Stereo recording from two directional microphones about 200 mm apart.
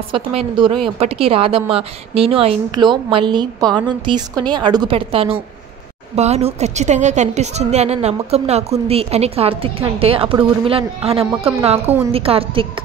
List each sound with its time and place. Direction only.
0.1 s a woman's voice: 25° right (ahead or behind)